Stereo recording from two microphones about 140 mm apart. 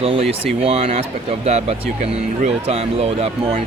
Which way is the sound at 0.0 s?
45° right (ahead or behind).